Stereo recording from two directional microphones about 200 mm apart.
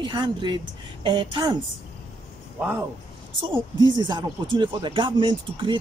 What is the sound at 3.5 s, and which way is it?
Speech, 20° right (ahead or behind).